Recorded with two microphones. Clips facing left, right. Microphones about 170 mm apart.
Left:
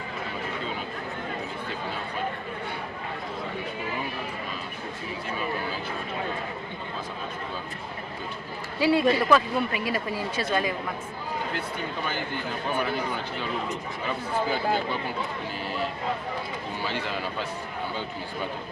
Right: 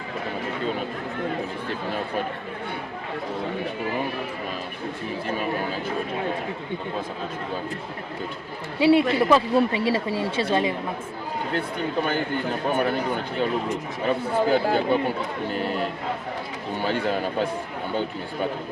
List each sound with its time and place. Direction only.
8.8 s a woman's voice: 25° right (ahead or behind)
12.6 s speech: 50° right (ahead or behind)
16.8 s speech: 50° right (ahead or behind)